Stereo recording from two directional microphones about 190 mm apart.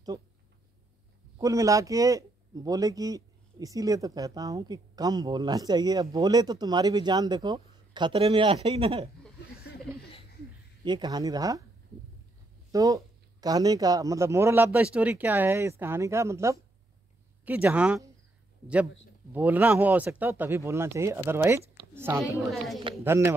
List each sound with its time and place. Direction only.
1.4 s a man's voice: 15° right (ahead or behind)
10.8 s a man's voice: 25° right (ahead or behind)
12.7 s a man's voice: 20° right (ahead or behind)
19.3 s a man's voice: 10° right (ahead or behind)